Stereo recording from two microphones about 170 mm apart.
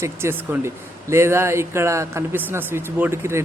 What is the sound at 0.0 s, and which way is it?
Speech, 15° right (ahead or behind).